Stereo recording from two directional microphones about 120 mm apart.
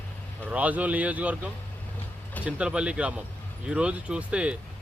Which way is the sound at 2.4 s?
10° right (ahead or behind).